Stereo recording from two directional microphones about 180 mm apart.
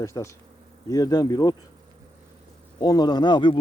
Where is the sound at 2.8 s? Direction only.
25° left (ahead or behind).